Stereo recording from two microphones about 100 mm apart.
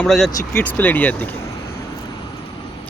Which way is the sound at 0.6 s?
20° left (ahead or behind).